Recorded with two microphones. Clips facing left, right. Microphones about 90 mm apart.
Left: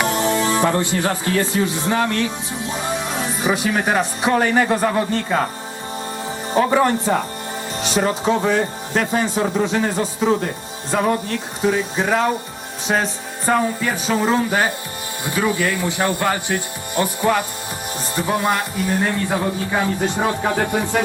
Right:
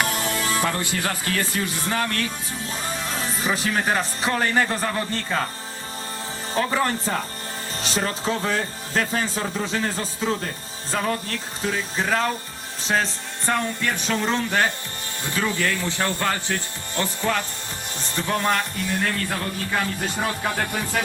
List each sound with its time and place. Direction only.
0.1 s music: 20° left (ahead or behind)
1.0 s speech: 15° left (ahead or behind)
1.5 s speech: 5° left (ahead or behind)
1.9 s speech: 15° left (ahead or behind)
2.6 s speech: 5° left (ahead or behind)
6.5 s speech: 10° left (ahead or behind)